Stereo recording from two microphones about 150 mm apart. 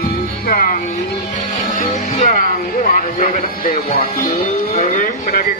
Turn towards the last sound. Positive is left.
turn(degrees=50)  # may be behind; listen again after turning